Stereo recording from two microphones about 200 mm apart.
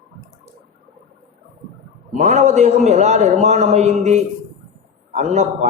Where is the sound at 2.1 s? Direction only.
35° right (ahead or behind).